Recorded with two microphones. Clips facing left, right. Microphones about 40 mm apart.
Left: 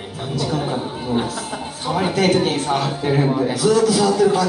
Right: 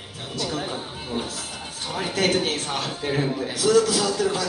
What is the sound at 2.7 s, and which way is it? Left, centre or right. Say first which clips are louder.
Speech: left 6 dB; centre.